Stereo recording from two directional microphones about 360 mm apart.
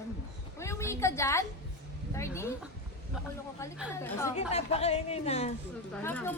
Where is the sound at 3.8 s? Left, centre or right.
Centre.